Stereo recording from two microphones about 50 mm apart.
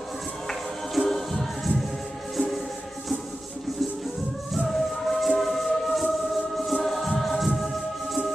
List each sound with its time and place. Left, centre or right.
0.5 s music: centre
4.6 s music: centre